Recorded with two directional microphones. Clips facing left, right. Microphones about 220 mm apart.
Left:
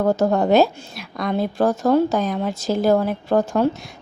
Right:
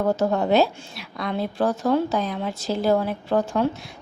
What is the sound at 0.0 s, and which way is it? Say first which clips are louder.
A woman's voice: left 3 dB; 45° left (ahead or behind).